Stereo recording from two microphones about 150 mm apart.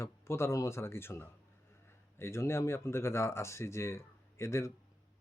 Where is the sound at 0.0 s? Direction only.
15° left (ahead or behind).